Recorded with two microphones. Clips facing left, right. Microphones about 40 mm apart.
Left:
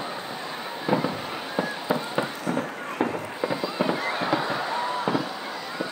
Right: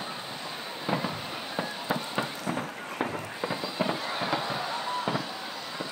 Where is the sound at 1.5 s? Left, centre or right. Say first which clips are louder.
Left 5 dB; centre.